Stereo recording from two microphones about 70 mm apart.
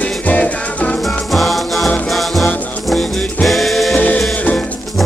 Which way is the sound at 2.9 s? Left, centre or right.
Centre.